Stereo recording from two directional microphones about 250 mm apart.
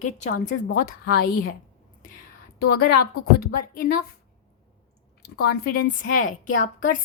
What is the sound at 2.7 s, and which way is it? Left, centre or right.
A woman's voice, left.